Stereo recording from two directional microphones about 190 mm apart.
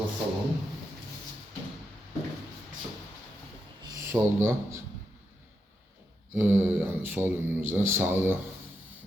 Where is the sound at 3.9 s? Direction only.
15° right (ahead or behind).